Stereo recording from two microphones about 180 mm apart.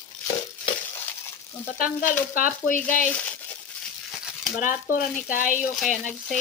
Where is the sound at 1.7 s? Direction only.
50° left (ahead or behind).